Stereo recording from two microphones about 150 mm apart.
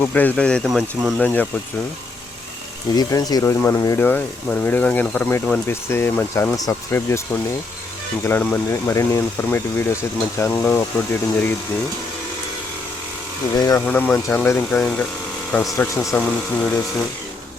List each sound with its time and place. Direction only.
0.0 s speech: 10° left (ahead or behind)
1.2 s speech: 10° left (ahead or behind)
2.9 s speech: 25° left (ahead or behind)
8.2 s speech: 15° left (ahead or behind)
13.6 s speech: 25° left (ahead or behind)
13.8 s speech: 10° left (ahead or behind)